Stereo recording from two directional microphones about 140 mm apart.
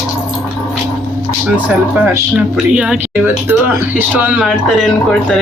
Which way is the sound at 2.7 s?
5° right (ahead or behind).